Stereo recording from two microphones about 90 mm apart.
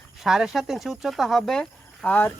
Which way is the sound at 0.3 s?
5° right (ahead or behind).